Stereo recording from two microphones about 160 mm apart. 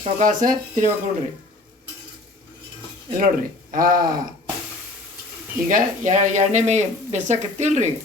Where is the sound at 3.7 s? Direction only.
60° right (ahead or behind).